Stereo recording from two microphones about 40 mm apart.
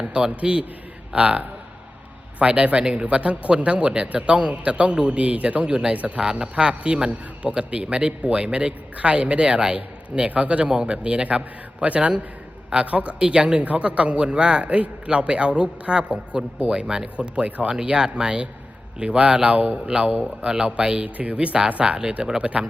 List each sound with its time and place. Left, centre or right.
0.0 s a man's voice: right
2.4 s a man's voice: right
9.7 s a man's voice: right
20.4 s a man's voice: right